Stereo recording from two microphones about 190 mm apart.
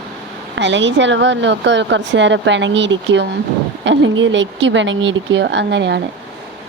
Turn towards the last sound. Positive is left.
turn(degrees=-65)  # may be behind; listen again after turning